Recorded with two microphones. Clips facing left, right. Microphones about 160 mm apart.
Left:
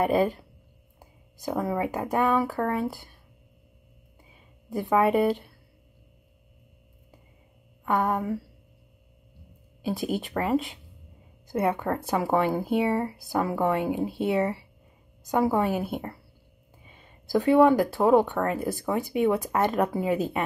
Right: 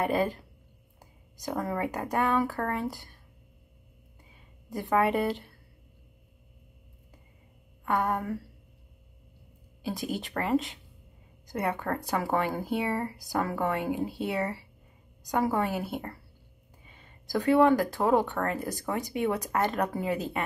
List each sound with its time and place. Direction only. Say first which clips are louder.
0.0 s speech: left 4 dB; 15° left (ahead or behind)
1.5 s speech: left 3 dB; 10° left (ahead or behind)
4.6 s speech: left 3 dB; 20° left (ahead or behind)
7.8 s speech: left 3 dB; 15° left (ahead or behind)
10.1 s speech: left 1 dB; 20° left (ahead or behind)
16.8 s a sound: left 2 dB; 15° left (ahead or behind)
17.9 s speech: left 5 dB; 15° left (ahead or behind)